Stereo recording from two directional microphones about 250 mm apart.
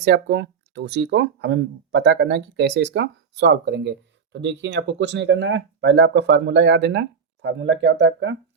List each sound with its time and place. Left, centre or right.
0.0 s speech: right